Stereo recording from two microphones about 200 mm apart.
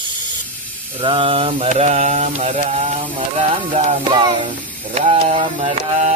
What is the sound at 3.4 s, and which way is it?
Music, 35° right (ahead or behind).